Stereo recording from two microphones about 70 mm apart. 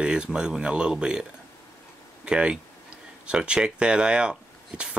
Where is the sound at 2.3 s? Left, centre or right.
Centre.